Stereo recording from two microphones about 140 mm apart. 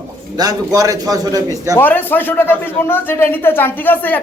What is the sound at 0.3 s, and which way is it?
A man's voice, 25° right (ahead or behind).